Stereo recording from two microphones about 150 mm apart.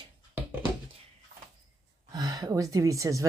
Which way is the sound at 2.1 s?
25° right (ahead or behind).